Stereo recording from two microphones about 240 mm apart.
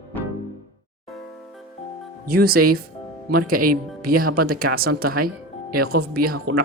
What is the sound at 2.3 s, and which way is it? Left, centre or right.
Speech, right.